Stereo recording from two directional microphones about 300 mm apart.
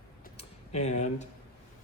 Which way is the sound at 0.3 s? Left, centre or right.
Left.